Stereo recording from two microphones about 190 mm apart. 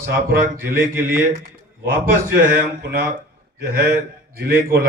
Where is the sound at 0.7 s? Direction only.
15° right (ahead or behind).